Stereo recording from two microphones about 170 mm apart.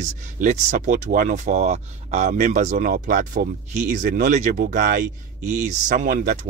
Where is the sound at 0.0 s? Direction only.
45° right (ahead or behind).